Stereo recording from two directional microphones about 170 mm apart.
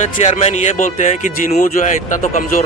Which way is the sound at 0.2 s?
40° left (ahead or behind).